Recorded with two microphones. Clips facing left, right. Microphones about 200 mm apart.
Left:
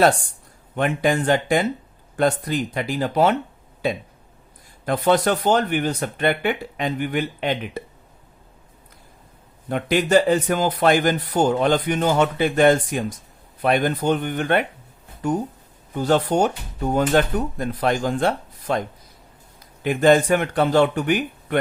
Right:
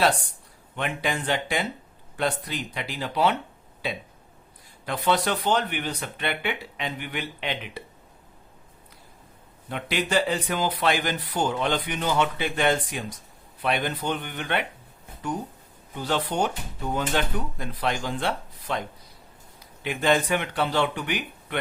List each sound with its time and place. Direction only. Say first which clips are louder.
0.8 s a man's voice: left 8 dB; 45° left (ahead or behind)
9.6 s a man's voice: left 8 dB; 45° left (ahead or behind)
16.0 s a man's voice: left 7 dB; 45° left (ahead or behind)